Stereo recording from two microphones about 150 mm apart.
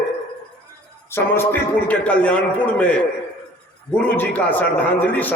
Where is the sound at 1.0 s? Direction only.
15° left (ahead or behind).